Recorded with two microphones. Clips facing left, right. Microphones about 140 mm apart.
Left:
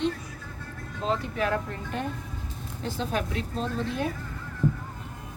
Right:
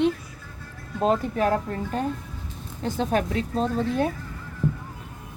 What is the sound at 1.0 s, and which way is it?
A woman's voice, 45° right (ahead or behind).